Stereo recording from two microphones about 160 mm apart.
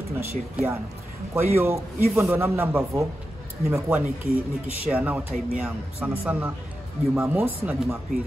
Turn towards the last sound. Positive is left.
turn(degrees=-10)  # may be behind; listen again after turning